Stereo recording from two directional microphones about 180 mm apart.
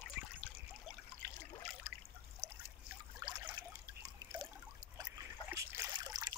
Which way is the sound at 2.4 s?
20° right (ahead or behind).